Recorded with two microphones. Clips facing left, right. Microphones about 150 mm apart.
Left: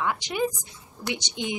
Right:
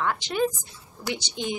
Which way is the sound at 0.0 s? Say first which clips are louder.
Right 1 dB; 15° left (ahead or behind).